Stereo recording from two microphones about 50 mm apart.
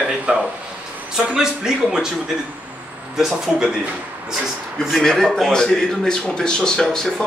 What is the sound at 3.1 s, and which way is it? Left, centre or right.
Speech, centre.